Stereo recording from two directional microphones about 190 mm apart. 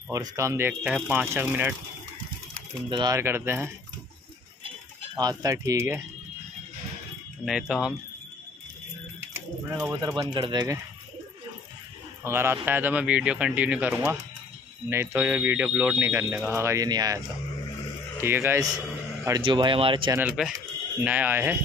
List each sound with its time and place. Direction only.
0.1 s speech: 15° right (ahead or behind)
2.9 s speech: 20° right (ahead or behind)
5.1 s speech: 20° right (ahead or behind)
7.4 s speech: 5° right (ahead or behind)
9.3 s speech: 15° right (ahead or behind)
12.2 s a man's voice: 10° right (ahead or behind)
18.2 s speech: 10° right (ahead or behind)
20.2 s speech: 5° right (ahead or behind)